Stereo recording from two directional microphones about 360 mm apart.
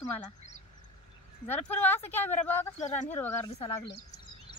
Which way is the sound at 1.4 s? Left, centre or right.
Centre.